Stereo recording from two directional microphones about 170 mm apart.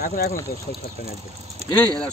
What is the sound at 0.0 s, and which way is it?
Speech, 60° left (ahead or behind).